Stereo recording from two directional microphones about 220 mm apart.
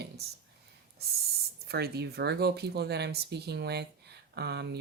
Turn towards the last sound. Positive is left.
turn(degrees=-50)  # may be behind; listen again after turning